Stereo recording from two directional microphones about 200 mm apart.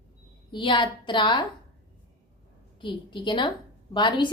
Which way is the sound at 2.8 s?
25° left (ahead or behind).